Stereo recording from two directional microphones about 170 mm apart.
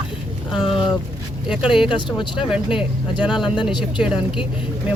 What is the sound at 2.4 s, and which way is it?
Speech, 5° right (ahead or behind).